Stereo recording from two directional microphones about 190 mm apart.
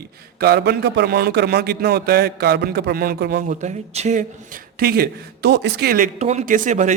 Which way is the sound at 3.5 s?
40° right (ahead or behind).